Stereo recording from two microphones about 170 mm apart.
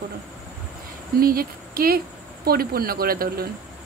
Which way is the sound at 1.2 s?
60° right (ahead or behind).